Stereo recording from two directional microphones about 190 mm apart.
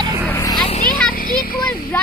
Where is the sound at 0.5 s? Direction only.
25° left (ahead or behind).